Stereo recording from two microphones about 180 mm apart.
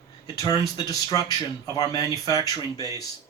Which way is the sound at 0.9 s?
20° left (ahead or behind).